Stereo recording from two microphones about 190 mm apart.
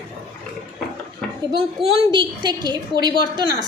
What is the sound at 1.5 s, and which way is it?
A woman's voice, 25° right (ahead or behind).